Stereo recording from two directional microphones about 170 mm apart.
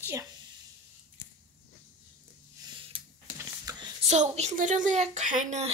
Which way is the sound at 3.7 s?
20° right (ahead or behind).